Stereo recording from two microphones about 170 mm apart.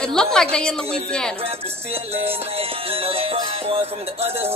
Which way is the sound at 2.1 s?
35° right (ahead or behind).